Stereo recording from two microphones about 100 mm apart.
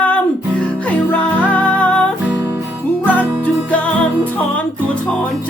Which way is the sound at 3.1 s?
15° left (ahead or behind).